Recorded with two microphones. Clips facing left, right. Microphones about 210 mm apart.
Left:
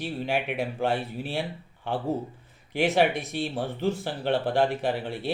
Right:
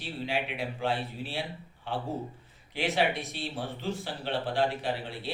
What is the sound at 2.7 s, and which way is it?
Speech, 50° left (ahead or behind).